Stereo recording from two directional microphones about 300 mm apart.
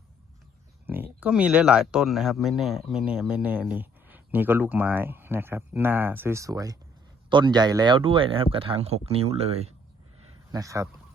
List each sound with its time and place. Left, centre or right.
0.9 s speech: centre